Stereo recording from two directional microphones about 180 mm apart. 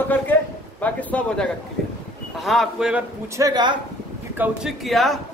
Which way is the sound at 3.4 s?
25° right (ahead or behind).